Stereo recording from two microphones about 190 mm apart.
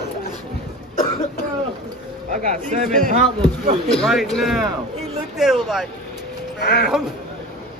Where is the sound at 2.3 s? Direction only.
45° right (ahead or behind).